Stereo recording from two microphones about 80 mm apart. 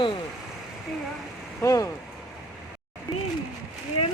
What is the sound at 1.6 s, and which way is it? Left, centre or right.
Speech, left.